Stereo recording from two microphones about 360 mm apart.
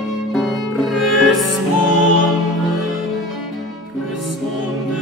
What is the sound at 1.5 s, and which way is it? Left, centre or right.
Music, left.